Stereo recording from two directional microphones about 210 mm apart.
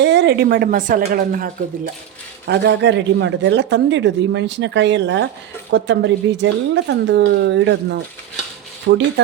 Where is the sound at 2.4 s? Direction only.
55° right (ahead or behind).